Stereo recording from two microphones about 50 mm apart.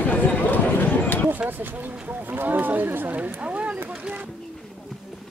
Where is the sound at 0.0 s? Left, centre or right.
Left.